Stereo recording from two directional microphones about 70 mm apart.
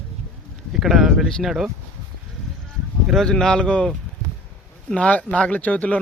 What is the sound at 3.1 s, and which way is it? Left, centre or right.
Speech, centre.